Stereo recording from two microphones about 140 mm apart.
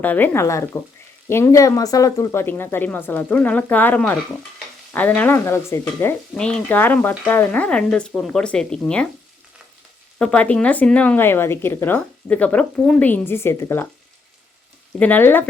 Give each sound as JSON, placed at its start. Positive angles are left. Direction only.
{"t": 0.0, "sound": "speech", "side_deg": 15}
{"t": 6.3, "sound": "speech", "side_deg": 5}
{"t": 10.2, "sound": "speech", "side_deg": 10}
{"t": 14.9, "sound": "speech", "side_deg": 10}